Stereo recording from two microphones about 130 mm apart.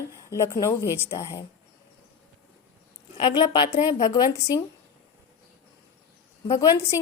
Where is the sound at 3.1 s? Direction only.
35° left (ahead or behind).